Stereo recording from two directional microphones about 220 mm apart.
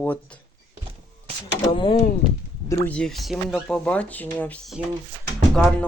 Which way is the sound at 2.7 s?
5° left (ahead or behind).